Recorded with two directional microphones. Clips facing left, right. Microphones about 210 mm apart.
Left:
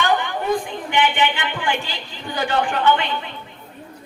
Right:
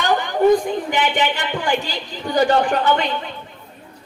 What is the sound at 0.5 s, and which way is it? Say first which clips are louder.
A woman's voice: right 4 dB; 40° right (ahead or behind).